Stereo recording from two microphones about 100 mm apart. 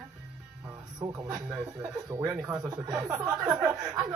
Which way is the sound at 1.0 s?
35° right (ahead or behind).